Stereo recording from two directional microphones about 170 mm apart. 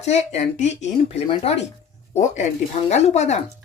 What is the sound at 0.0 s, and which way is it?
Speech, 40° left (ahead or behind).